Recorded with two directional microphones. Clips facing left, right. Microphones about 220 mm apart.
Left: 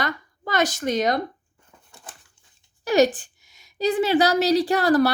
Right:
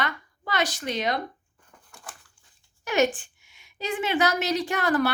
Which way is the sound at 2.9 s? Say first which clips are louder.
Left 5 dB; 35° left (ahead or behind).